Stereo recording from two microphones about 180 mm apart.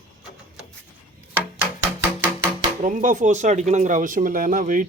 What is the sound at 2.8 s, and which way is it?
Speech, 45° right (ahead or behind).